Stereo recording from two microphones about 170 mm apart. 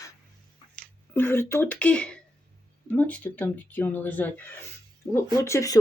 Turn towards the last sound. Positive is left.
turn(degrees=20)  # may be behind; listen again after turning